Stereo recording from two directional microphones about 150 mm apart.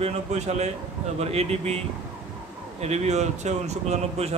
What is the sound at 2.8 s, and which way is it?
Speech, 50° right (ahead or behind).